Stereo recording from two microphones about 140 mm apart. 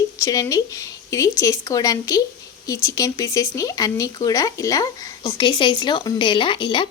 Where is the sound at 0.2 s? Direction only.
25° left (ahead or behind).